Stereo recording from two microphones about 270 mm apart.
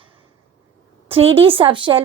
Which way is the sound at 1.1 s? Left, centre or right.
Right.